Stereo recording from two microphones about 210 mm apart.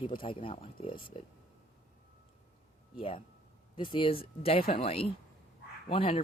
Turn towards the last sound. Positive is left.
turn(degrees=25)  # may be behind; listen again after turning